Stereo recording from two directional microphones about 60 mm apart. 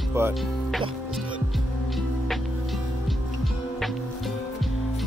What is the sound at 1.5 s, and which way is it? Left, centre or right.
Music, centre.